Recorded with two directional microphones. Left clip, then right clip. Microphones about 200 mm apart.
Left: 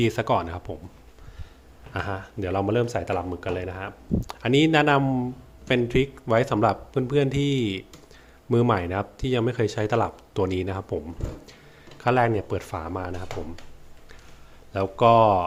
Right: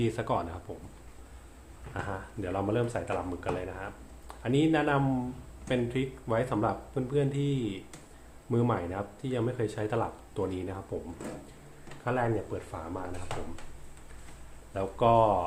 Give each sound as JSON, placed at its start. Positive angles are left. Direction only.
{"t": 0.0, "sound": "speech", "side_deg": 35}
{"t": 1.9, "sound": "speech", "side_deg": 40}
{"t": 12.0, "sound": "speech", "side_deg": 45}
{"t": 14.7, "sound": "speech", "side_deg": 35}